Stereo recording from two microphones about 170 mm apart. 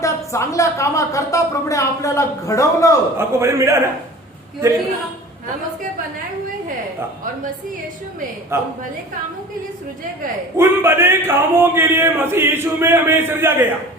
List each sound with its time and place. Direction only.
0.0 s a woman's voice: 20° left (ahead or behind)
3.2 s speech: 15° right (ahead or behind)
8.5 s speech: 15° right (ahead or behind)
10.6 s speech: 15° right (ahead or behind)